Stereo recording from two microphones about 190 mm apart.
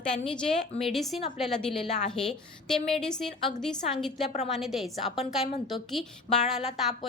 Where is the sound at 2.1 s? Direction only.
5° left (ahead or behind).